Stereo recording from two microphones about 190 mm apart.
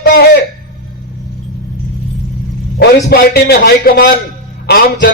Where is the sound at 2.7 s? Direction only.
55° left (ahead or behind).